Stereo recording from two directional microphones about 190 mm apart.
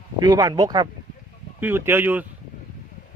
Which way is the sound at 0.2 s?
20° right (ahead or behind).